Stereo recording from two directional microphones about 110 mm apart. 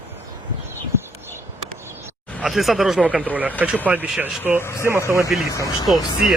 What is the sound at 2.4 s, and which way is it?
Speech, centre (ahead or behind).